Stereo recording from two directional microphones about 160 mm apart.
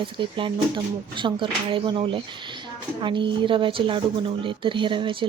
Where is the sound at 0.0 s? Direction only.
30° right (ahead or behind).